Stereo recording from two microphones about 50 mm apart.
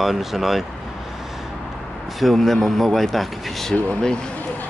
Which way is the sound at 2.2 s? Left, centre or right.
Centre.